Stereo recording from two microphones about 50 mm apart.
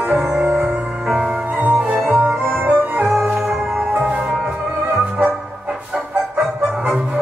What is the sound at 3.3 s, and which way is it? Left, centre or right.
Music, centre.